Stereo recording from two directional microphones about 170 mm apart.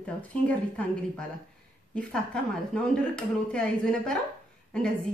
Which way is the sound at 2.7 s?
5° left (ahead or behind).